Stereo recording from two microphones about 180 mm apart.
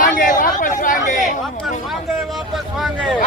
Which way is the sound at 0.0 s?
45° left (ahead or behind).